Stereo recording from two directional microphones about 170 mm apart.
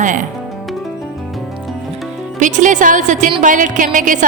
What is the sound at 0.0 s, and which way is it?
Speech, 50° right (ahead or behind).